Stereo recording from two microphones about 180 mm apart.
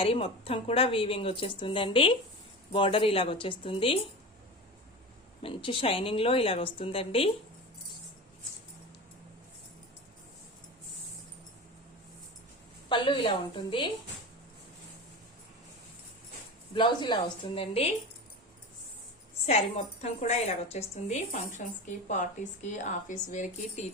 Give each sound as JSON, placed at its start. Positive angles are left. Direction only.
{"t": 0.0, "sound": "a woman's voice", "side_deg": 30}
{"t": 5.4, "sound": "a woman's voice", "side_deg": 30}
{"t": 12.9, "sound": "a woman's voice", "side_deg": 25}
{"t": 16.7, "sound": "a woman's voice", "side_deg": 25}
{"t": 19.5, "sound": "a woman's voice", "side_deg": 40}